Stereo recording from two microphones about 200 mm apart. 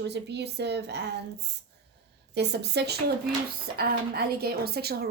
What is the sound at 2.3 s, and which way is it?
A woman's voice, 55° right (ahead or behind).